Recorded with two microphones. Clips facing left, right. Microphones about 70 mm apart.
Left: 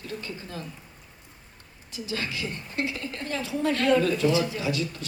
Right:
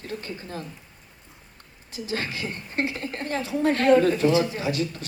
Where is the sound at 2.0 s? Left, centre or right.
Right.